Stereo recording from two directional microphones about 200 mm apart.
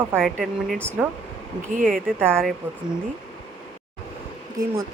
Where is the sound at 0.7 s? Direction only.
10° right (ahead or behind).